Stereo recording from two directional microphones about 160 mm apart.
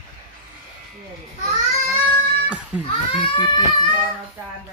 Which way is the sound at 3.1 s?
30° left (ahead or behind).